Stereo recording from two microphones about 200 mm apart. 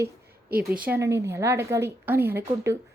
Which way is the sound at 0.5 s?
50° right (ahead or behind).